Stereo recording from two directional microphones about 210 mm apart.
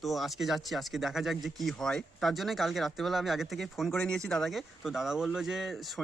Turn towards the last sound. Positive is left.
turn(degrees=0)  # may be behind; listen again after turning